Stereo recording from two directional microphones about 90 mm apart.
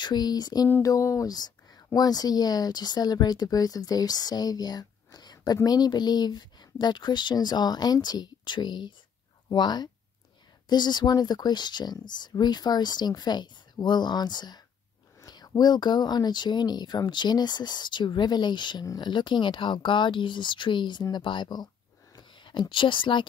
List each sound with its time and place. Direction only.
0.0 s speech: 50° left (ahead or behind); by 23.2 s 65° left (ahead or behind)